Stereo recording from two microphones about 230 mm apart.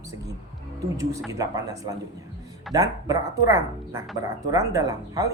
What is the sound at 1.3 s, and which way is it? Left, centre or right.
Speech, centre.